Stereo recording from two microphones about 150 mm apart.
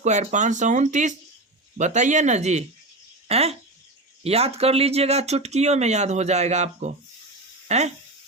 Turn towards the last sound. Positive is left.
turn(degrees=-45)  # may be behind; listen again after turning